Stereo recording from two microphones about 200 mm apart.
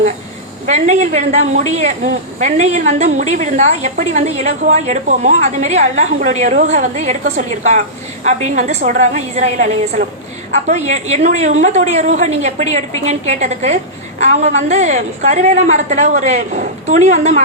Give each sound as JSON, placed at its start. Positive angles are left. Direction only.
{"t": 0.7, "sound": "a woman's voice", "side_deg": -35}